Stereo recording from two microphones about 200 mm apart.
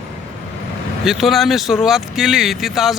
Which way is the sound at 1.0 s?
Centre (ahead or behind).